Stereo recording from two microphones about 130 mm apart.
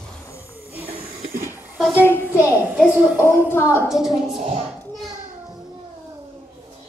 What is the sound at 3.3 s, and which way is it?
Speech, 15° left (ahead or behind).